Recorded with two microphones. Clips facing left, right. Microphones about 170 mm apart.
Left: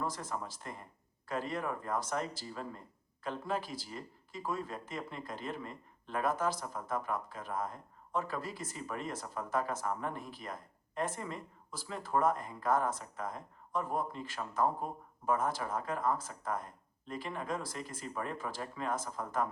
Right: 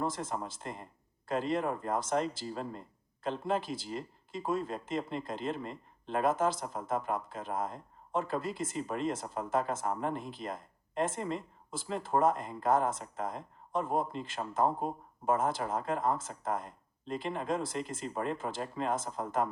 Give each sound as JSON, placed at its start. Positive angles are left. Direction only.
{"t": 0.0, "sound": "speech", "side_deg": -25}